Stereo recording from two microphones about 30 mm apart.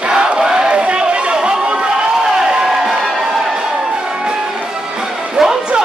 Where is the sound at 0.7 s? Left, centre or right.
Right.